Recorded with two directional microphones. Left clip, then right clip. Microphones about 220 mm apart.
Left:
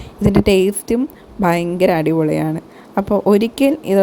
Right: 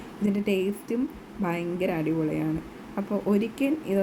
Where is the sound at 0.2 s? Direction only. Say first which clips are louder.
Left 13 dB; 35° left (ahead or behind).